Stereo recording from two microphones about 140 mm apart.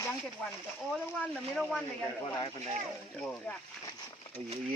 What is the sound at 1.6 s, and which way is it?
Speech, 5° left (ahead or behind).